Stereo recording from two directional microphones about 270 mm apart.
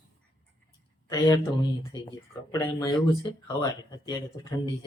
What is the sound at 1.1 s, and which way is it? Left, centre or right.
Speech, centre.